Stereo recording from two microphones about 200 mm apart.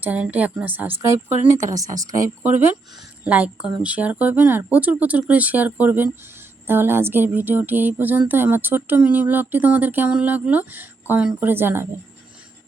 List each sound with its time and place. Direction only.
0.0 s speech: 10° right (ahead or behind)
3.2 s speech: 5° right (ahead or behind)